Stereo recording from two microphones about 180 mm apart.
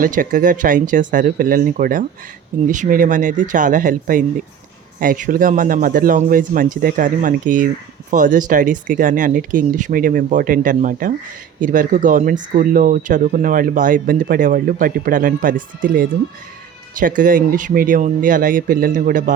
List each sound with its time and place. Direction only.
0.0 s speech: 50° right (ahead or behind)